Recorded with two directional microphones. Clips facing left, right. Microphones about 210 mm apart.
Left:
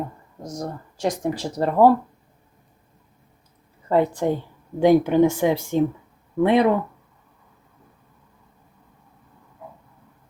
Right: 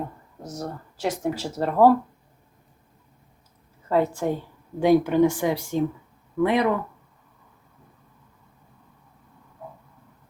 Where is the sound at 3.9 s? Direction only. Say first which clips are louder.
Left 3 dB; 20° left (ahead or behind).